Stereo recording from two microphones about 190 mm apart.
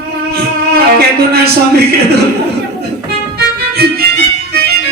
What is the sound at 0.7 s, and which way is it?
Music, 55° right (ahead or behind).